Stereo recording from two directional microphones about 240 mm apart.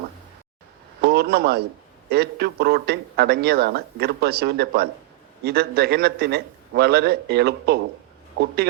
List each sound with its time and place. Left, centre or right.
1.0 s a man's voice: right